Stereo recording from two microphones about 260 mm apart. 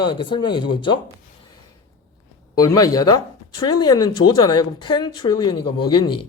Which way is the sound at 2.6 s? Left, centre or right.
Centre.